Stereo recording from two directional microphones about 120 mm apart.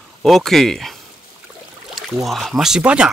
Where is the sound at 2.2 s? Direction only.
Centre (ahead or behind).